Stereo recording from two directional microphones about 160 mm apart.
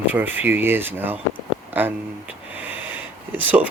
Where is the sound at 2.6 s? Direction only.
10° right (ahead or behind).